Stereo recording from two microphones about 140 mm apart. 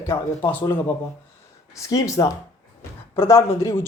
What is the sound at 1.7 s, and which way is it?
Speech, 25° left (ahead or behind).